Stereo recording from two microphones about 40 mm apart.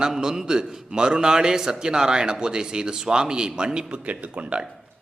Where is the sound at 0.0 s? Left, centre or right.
Centre; by 4.6 s right.